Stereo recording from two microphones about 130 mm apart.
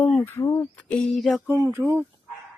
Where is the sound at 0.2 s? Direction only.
20° left (ahead or behind); by 1.4 s centre (ahead or behind).